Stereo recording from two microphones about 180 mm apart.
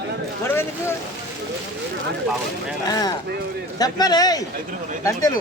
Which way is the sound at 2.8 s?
20° left (ahead or behind).